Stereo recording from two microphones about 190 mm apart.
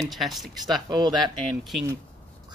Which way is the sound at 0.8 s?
20° right (ahead or behind).